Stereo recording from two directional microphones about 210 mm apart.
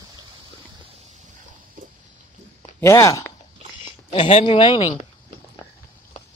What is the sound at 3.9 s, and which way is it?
Speech, 25° left (ahead or behind).